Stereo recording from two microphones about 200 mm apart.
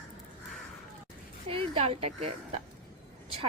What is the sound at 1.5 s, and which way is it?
Speech, 30° right (ahead or behind).